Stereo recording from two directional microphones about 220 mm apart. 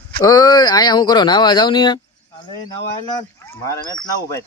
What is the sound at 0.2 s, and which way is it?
Speech, 15° left (ahead or behind).